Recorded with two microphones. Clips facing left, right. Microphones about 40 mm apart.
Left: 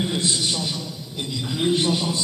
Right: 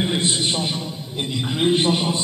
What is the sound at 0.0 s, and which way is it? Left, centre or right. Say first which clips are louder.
A man's voice: right 2 dB; right.